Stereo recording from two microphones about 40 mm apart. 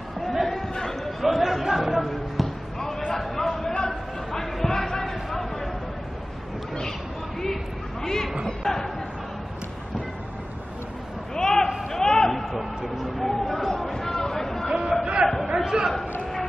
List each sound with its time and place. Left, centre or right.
0.3 s chatter: centre
0.6 s chatter: centre
1.2 s speech: centre
2.0 s basketball bounce: centre
3.2 s a sound: centre
8.0 s chatter: centre
8.5 s speech: centre
11.3 s a sound: centre
14.7 s a sound: centre